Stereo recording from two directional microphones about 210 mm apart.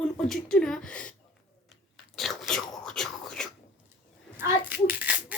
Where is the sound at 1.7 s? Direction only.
Centre (ahead or behind).